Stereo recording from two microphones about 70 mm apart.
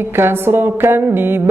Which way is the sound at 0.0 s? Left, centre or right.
Right.